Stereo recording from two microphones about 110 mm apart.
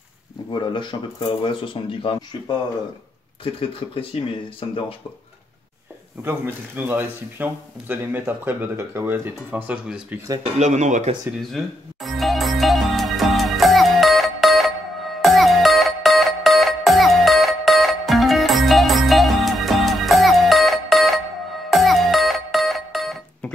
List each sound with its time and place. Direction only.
0.5 s speech: 45° left (ahead or behind)
3.5 s speech: 55° left (ahead or behind)
6.2 s speech: 20° right (ahead or behind)
10.4 s speech: 90° right
11.5 s music: centre (ahead or behind)